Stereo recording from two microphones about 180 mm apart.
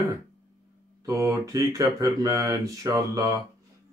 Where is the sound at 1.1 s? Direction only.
20° right (ahead or behind).